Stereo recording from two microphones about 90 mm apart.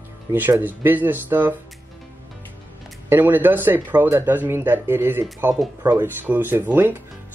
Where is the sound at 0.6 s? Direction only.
20° right (ahead or behind).